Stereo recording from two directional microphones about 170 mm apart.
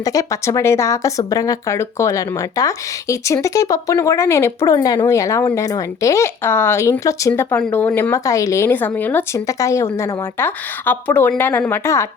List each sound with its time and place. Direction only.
0.0 s a woman's voice: 20° left (ahead or behind)